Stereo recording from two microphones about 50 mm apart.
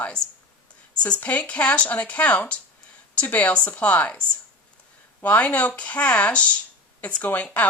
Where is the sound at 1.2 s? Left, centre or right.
Left.